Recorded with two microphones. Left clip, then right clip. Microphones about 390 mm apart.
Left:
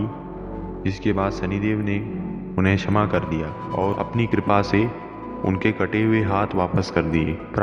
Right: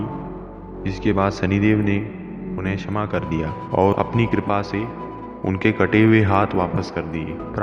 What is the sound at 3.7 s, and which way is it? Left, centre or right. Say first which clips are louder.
Speech: right 6 dB; right.